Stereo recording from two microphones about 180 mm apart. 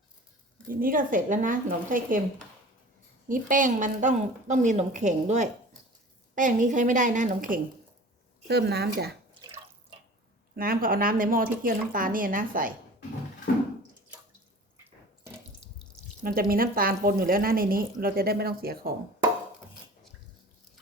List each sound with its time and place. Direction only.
0.7 s speech: 50° right (ahead or behind)
3.2 s a woman's voice: 50° right (ahead or behind)
8.4 s speech: 65° right (ahead or behind)
9.4 s water: 20° right (ahead or behind)
10.5 s speech: 55° right (ahead or behind)
16.2 s speech: 55° right (ahead or behind)